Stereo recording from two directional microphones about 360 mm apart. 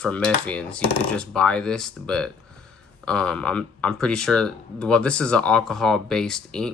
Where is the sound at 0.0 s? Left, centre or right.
Centre.